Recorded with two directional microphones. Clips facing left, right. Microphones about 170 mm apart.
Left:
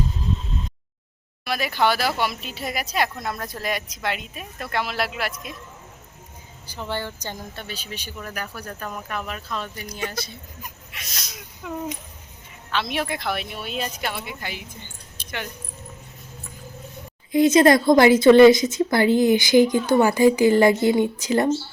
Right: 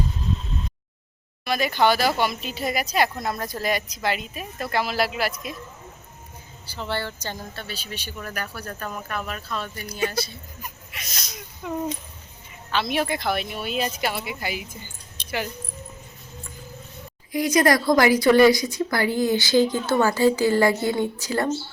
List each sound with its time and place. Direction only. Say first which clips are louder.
1.5 s speech: right 2 dB; centre (ahead or behind)
6.7 s speech: even; 15° left (ahead or behind)
10.9 s speech: right 1 dB; centre (ahead or behind)
12.7 s speech: right 2 dB; centre (ahead or behind)
15.2 s keys jangling: right 4 dB; 10° left (ahead or behind)
17.3 s a woman's voice: left 5 dB; 25° left (ahead or behind)